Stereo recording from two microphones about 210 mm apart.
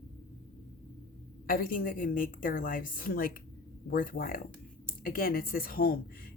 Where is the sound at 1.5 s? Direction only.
45° left (ahead or behind).